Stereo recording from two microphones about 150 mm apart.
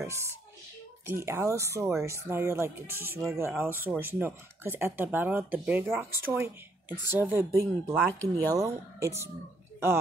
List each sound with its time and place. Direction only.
0.0 s speech: 20° right (ahead or behind)
8.1 s speech: 15° left (ahead or behind)
8.5 s speech: 20° right (ahead or behind)